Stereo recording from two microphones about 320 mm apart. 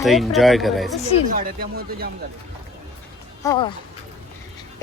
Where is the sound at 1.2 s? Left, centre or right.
Right.